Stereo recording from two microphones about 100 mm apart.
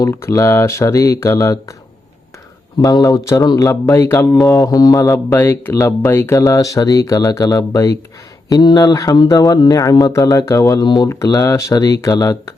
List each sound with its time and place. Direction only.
0.0 s speech: 25° left (ahead or behind)
2.8 s speech: 35° left (ahead or behind)
5.3 s speech: 25° left (ahead or behind)
6.4 s speech: 35° left (ahead or behind)
11.1 s speech: 35° left (ahead or behind)